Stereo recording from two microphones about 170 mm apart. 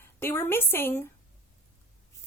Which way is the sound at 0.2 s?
15° left (ahead or behind).